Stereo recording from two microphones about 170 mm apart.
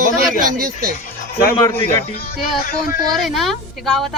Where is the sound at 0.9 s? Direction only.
60° left (ahead or behind).